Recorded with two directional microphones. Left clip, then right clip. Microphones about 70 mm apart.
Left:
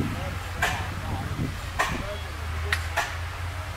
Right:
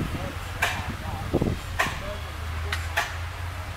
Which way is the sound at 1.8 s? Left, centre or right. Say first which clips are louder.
Even; right.